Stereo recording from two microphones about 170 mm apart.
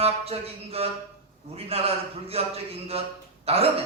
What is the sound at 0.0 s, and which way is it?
Speech, 35° right (ahead or behind).